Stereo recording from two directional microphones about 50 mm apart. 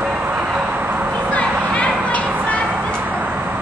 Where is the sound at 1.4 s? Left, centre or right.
Left.